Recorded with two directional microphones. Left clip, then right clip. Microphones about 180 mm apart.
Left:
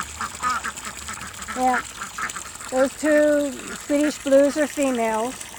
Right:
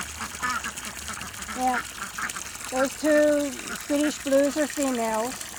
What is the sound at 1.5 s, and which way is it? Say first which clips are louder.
Speech: left 5 dB; 40° left (ahead or behind).